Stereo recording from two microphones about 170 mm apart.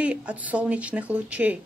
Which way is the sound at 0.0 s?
5° right (ahead or behind).